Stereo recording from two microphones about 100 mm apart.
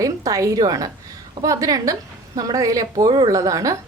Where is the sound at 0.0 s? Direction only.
35° right (ahead or behind).